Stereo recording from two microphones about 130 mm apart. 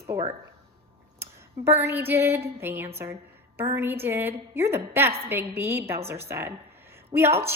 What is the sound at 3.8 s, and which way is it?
A woman's voice, 15° right (ahead or behind).